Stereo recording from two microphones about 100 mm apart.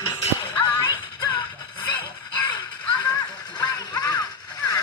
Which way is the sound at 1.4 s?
55° left (ahead or behind).